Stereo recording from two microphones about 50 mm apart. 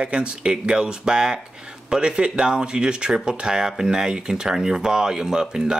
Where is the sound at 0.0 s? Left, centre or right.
Right.